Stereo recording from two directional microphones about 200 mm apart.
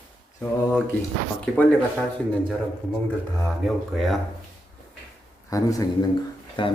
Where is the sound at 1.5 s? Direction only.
10° left (ahead or behind).